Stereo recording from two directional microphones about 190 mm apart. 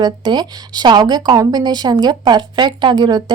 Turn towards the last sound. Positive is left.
turn(degrees=-25)  # may be behind; listen again after turning